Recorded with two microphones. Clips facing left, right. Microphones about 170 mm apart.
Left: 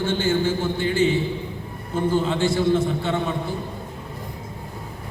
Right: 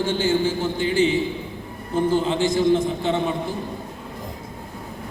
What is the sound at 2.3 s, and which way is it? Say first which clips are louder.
Speech: right 1 dB; 15° right (ahead or behind).